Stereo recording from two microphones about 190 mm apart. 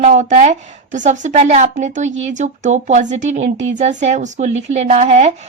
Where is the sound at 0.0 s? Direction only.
40° right (ahead or behind).